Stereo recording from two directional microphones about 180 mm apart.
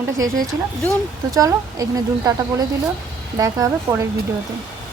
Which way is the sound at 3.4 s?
20° right (ahead or behind).